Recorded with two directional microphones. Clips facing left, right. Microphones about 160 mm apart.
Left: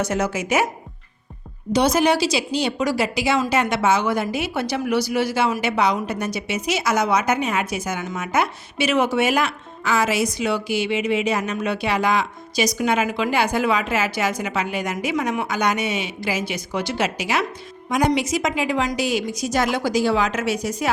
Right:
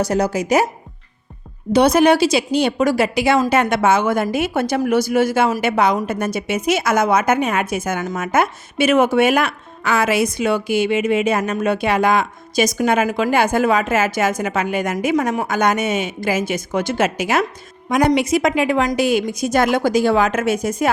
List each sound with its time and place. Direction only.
0.0 s a woman's voice: 35° right (ahead or behind)
1.7 s a woman's voice: 55° right (ahead or behind)